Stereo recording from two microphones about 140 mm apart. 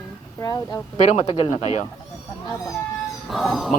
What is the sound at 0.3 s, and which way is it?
Speech, 25° left (ahead or behind).